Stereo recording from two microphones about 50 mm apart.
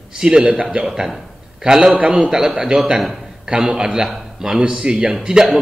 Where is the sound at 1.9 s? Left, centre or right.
Right.